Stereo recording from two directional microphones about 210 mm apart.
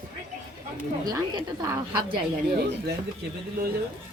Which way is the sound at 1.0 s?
20° right (ahead or behind).